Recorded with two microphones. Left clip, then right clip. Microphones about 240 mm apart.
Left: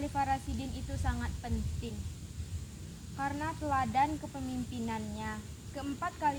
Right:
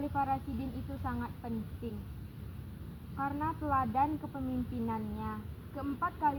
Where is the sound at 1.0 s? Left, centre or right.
Left.